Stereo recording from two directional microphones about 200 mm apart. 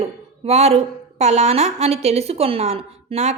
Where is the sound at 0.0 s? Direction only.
30° right (ahead or behind).